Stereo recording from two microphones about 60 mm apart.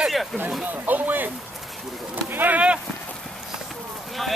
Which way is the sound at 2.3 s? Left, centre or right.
Right.